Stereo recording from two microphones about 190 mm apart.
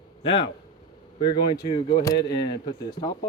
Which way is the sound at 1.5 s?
25° left (ahead or behind).